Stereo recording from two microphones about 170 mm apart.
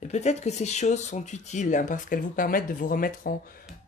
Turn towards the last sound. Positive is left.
turn(degrees=55)  # may be behind; listen again after turning